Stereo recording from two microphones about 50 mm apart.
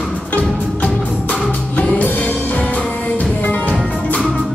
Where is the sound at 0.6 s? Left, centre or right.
Left.